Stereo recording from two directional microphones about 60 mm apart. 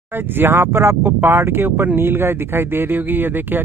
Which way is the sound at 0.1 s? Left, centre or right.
Right.